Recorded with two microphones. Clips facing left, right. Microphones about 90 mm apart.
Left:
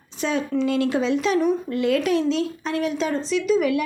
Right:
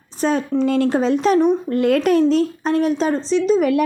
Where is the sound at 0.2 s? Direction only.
40° right (ahead or behind).